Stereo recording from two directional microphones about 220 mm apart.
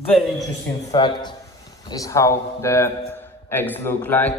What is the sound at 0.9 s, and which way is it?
A man's voice, 20° left (ahead or behind).